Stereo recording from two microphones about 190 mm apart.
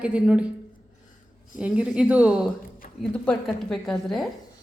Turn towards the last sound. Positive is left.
turn(degrees=0)  # may be behind; listen again after turning